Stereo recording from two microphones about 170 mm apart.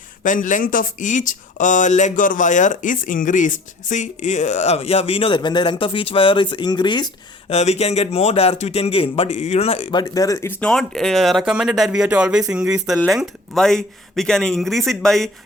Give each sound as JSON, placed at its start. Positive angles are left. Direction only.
{"t": 0.2, "sound": "speech", "side_deg": 50}
{"t": 7.5, "sound": "a man's voice", "side_deg": 40}
{"t": 10.6, "sound": "speech", "side_deg": 5}